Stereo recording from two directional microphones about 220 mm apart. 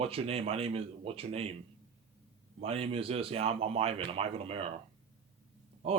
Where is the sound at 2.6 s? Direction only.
25° right (ahead or behind).